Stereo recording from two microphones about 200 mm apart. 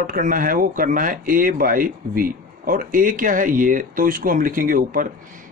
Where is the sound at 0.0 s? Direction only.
45° right (ahead or behind).